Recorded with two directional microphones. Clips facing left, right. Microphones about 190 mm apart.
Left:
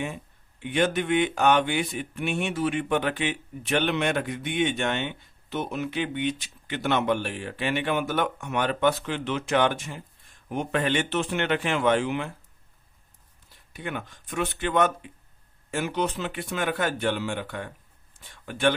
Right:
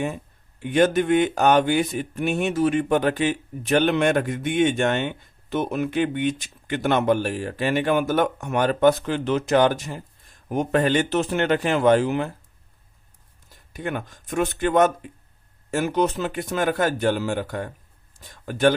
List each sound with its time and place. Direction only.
0.6 s speech: 45° right (ahead or behind)
13.5 s speech: 45° right (ahead or behind)